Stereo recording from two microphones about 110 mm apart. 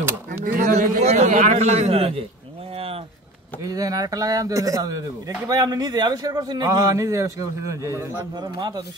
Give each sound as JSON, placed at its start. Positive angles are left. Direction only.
{"t": 0.7, "sound": "a man's voice", "side_deg": -90}
{"t": 2.7, "sound": "a sound", "side_deg": -60}
{"t": 3.6, "sound": "a man's voice", "side_deg": -35}
{"t": 8.4, "sound": "a man's voice", "side_deg": -40}